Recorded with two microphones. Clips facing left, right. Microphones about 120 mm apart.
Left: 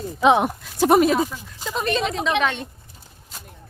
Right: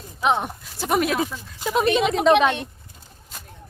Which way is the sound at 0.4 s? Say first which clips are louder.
Left 9 dB; 45° left (ahead or behind).